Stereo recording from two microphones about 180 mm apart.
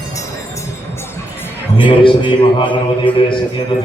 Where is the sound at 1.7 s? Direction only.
30° left (ahead or behind).